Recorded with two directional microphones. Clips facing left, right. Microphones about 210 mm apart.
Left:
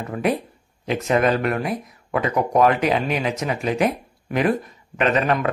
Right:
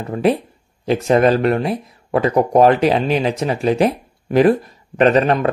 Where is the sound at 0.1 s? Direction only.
30° right (ahead or behind).